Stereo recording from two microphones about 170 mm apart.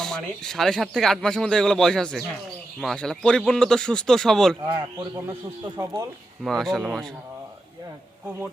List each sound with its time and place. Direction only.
0.0 s speech: 5° left (ahead or behind)
4.7 s speech: 25° right (ahead or behind)
6.4 s speech: centre (ahead or behind)